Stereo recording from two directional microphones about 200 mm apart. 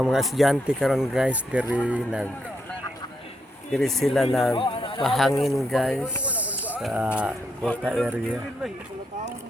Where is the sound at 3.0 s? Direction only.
20° left (ahead or behind).